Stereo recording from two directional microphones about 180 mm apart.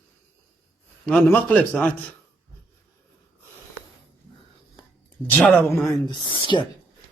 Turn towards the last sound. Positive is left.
turn(degrees=25)  # may be behind; listen again after turning